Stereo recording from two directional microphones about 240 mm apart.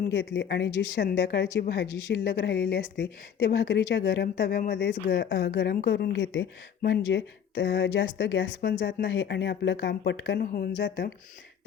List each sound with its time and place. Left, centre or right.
0.1 s speech: left